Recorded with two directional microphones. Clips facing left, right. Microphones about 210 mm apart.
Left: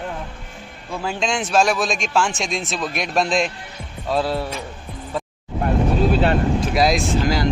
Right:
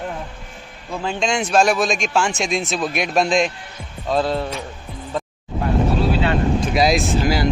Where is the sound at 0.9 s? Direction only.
5° left (ahead or behind).